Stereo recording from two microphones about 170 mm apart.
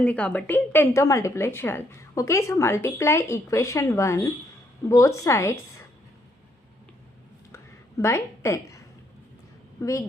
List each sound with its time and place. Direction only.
0.0 s a woman's voice: 5° left (ahead or behind)
7.5 s a sound: 15° left (ahead or behind)
9.8 s a woman's voice: 15° left (ahead or behind)